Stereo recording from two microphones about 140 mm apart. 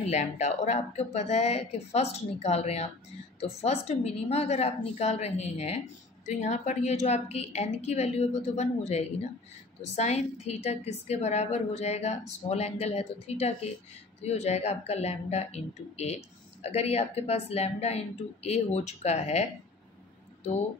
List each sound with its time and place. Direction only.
0.0 s a woman's voice: 55° left (ahead or behind)